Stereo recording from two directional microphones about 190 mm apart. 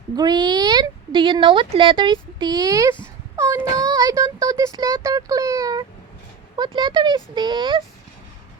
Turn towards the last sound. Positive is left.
turn(degrees=-25)  # may be behind; listen again after turning